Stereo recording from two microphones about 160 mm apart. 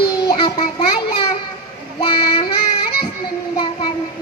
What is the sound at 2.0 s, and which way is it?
Child singing, 30° left (ahead or behind).